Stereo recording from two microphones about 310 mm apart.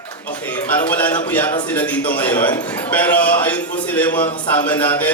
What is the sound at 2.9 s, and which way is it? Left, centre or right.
A man's voice, centre.